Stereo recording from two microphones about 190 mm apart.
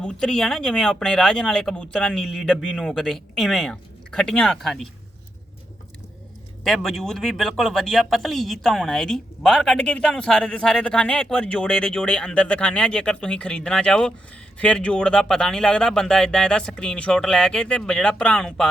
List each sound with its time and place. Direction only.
0.0 s speech: 5° left (ahead or behind)
6.7 s speech: centre (ahead or behind)